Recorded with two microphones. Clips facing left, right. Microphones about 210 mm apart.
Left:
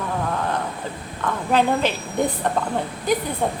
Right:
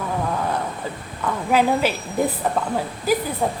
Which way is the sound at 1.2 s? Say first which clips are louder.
Right 1 dB; 10° right (ahead or behind).